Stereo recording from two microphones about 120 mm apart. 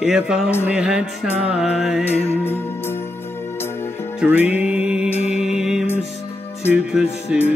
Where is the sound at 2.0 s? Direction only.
20° left (ahead or behind).